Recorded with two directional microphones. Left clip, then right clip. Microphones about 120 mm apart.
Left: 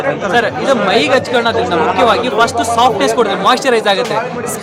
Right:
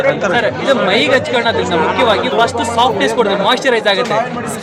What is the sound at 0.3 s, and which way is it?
Speech, 30° left (ahead or behind).